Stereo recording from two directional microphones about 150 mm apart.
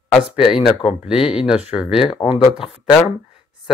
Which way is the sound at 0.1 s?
5° right (ahead or behind).